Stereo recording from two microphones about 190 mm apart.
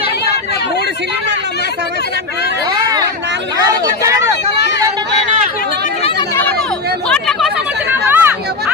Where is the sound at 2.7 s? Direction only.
20° right (ahead or behind).